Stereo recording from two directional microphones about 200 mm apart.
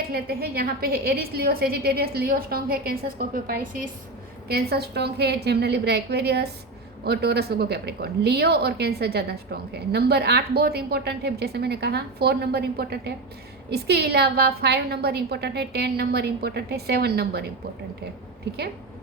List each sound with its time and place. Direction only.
0.0 s a woman's voice: 50° right (ahead or behind)